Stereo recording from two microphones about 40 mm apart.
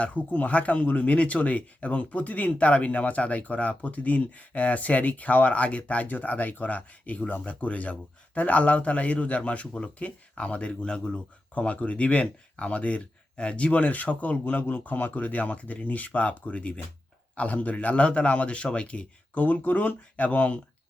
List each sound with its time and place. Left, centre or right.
0.0 s speech: left
11.5 s speech: left
19.3 s speech: left